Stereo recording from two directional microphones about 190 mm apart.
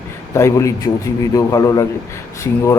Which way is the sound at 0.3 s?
15° left (ahead or behind).